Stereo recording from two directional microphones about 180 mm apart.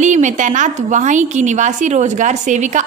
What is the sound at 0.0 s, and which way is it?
A woman's voice, 40° right (ahead or behind).